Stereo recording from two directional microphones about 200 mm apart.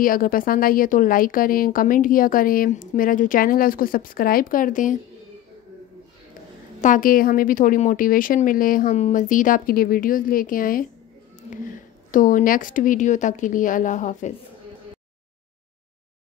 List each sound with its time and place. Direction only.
0.0 s a woman's voice: 45° left (ahead or behind)
6.8 s a woman's voice: 40° left (ahead or behind)